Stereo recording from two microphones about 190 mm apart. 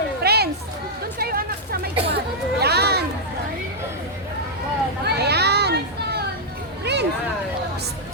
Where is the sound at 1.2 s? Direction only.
55° right (ahead or behind).